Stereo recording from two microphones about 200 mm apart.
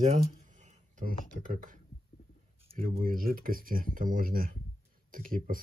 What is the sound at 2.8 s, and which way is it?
Speech, 45° right (ahead or behind).